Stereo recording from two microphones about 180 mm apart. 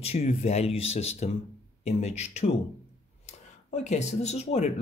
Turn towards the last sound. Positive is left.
turn(degrees=35)  # may be behind; listen again after turning